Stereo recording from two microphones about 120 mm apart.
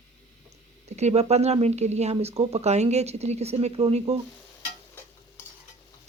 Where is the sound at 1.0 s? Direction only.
65° right (ahead or behind).